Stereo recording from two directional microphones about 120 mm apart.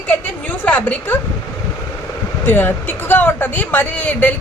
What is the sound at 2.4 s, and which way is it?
Speech, 15° left (ahead or behind).